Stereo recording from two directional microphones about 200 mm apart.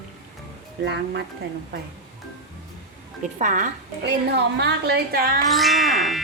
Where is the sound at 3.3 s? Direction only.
40° right (ahead or behind).